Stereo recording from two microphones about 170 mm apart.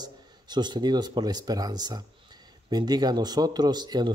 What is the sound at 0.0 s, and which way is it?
Speech, 25° right (ahead or behind).